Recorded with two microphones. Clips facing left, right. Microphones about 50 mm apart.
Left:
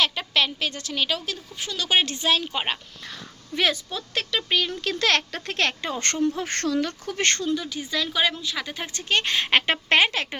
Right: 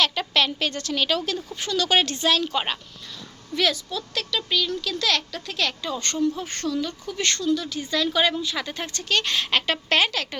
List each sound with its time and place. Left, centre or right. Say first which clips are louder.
0.0 s speech: right 1 dB; centre
3.5 s speech: even; left
7.4 s speech: right 3 dB; left
7.7 s speech: right 3 dB; centre
8.9 s speech: left 1 dB; left